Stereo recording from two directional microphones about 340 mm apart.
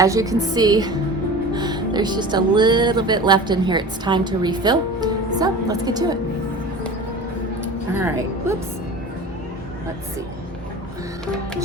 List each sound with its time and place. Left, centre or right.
0.0 s speech: centre
7.9 s speech: centre